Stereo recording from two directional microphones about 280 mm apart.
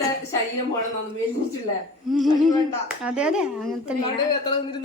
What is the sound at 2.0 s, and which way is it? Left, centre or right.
Speech, centre.